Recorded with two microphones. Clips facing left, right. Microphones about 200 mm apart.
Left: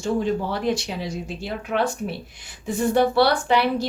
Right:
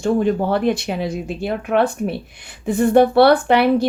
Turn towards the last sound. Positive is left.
turn(degrees=-55)  # may be behind; listen again after turning